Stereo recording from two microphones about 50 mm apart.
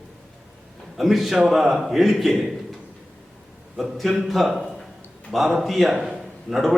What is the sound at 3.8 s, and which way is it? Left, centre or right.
A man's voice, centre.